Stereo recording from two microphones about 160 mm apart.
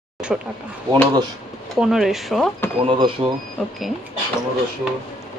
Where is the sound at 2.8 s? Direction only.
30° right (ahead or behind).